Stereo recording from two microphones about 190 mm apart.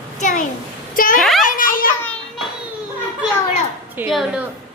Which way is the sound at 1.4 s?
45° left (ahead or behind).